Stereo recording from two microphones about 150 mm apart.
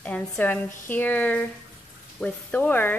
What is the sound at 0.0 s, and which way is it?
Speech, 10° left (ahead or behind).